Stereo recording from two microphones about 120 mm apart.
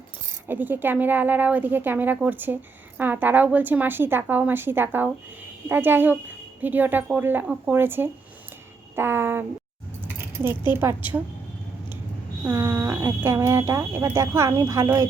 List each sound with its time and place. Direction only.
0.4 s speech: 15° right (ahead or behind)
12.5 s speech: 20° right (ahead or behind)